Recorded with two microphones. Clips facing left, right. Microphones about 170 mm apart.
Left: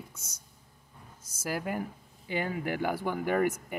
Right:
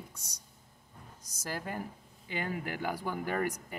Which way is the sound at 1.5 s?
15° left (ahead or behind).